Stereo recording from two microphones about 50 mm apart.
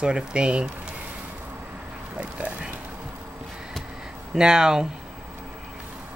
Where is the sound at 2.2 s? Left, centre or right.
Right.